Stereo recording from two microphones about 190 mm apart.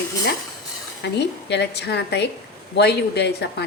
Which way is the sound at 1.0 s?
65° left (ahead or behind).